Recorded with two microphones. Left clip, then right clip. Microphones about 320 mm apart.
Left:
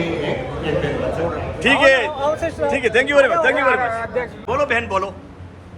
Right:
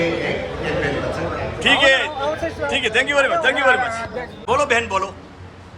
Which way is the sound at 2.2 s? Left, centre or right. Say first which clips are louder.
Left 3 dB; left.